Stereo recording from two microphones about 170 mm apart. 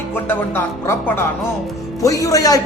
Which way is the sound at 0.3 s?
10° left (ahead or behind).